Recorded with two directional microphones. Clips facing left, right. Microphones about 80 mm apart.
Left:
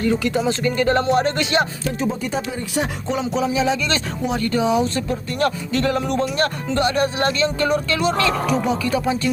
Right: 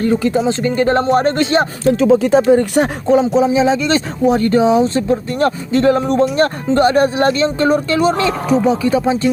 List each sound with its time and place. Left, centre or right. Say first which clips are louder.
0.0 s speech: right 5 dB; right
1.9 s speech: right 12 dB; right
3.3 s speech: right 7 dB; right